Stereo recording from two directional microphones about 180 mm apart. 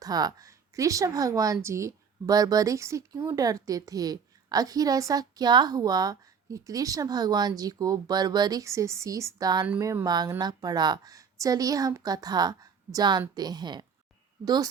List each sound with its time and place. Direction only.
0.0 s speech: 20° right (ahead or behind)